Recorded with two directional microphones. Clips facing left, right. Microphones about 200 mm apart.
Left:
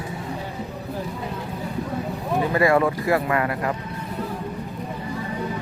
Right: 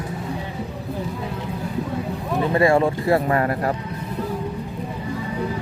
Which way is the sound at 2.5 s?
30° right (ahead or behind).